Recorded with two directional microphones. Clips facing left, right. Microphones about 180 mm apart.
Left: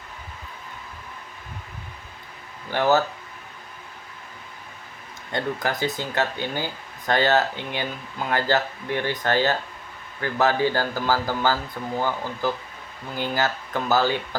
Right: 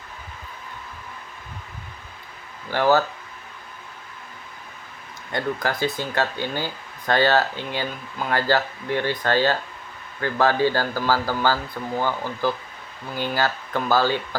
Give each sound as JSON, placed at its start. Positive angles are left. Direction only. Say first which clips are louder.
{"t": 2.7, "sound": "speech", "louder": "right 1 dB", "side_deg": 20}
{"t": 5.3, "sound": "speech", "louder": "right 1 dB", "side_deg": 20}
{"t": 13.1, "sound": "speech", "louder": "right 1 dB", "side_deg": 15}